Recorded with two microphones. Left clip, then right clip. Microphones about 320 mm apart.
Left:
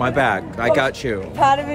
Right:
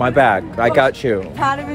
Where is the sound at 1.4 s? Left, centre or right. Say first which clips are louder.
Left 3 dB; left.